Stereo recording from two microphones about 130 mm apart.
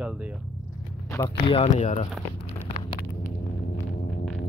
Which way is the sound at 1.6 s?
65° left (ahead or behind).